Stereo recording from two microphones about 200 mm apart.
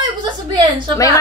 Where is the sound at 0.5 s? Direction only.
20° right (ahead or behind).